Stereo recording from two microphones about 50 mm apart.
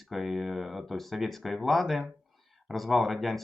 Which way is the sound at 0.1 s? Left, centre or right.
Centre.